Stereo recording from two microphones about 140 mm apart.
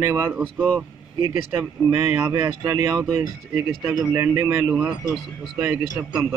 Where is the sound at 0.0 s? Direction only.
25° right (ahead or behind); by 6.0 s 10° right (ahead or behind).